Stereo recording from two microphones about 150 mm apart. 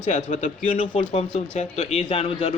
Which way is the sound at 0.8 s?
40° left (ahead or behind).